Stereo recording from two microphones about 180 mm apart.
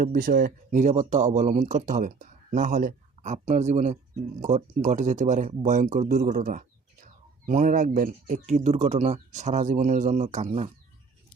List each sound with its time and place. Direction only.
0.0 s speech: 50° right (ahead or behind)